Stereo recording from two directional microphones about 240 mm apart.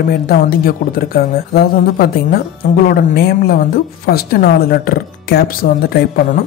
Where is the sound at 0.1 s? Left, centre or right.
Left.